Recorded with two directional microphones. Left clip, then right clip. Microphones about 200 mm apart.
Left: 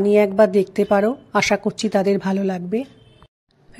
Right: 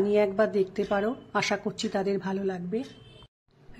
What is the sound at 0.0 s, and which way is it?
A woman's voice, 35° left (ahead or behind).